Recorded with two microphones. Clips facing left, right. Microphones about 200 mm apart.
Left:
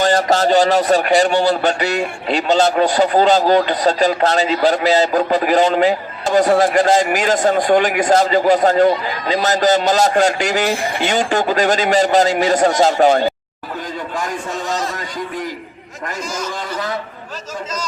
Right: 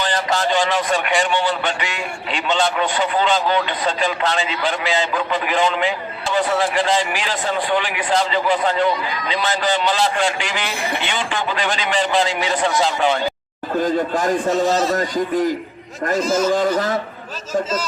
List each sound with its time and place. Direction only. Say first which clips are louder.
0.0 s a man's voice: left 6 dB; 45° left (ahead or behind)
13.8 s a man's voice: right 6 dB; 50° right (ahead or behind)
16.6 s a man's voice: right 6 dB; 50° right (ahead or behind)